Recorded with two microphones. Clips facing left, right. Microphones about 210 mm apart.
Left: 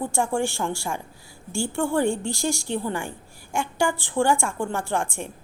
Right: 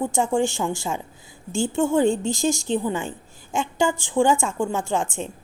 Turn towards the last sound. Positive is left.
turn(degrees=-20)  # may be behind; listen again after turning